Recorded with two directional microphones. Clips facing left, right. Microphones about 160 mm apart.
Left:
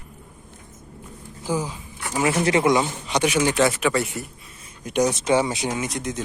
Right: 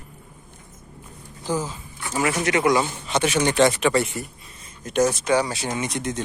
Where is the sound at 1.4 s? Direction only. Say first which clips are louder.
Even; 10° left (ahead or behind).